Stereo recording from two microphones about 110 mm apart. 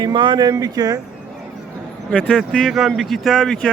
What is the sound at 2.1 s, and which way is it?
Speech, 10° left (ahead or behind).